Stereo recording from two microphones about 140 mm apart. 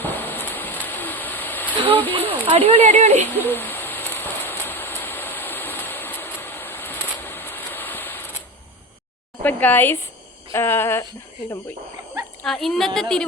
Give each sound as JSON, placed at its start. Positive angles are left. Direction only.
{"t": 0.0, "sound": "a sound", "side_deg": 15}
{"t": 1.9, "sound": "speech", "side_deg": 10}
{"t": 2.4, "sound": "speech", "side_deg": -40}
{"t": 3.3, "sound": "owl", "side_deg": 15}
{"t": 9.4, "sound": "speech", "side_deg": 10}
{"t": 12.5, "sound": "a woman's voice", "side_deg": 0}